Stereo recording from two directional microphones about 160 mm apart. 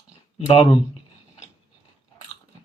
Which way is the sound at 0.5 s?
30° left (ahead or behind).